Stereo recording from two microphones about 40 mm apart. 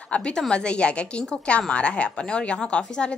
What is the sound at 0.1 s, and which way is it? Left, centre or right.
A woman's voice, left.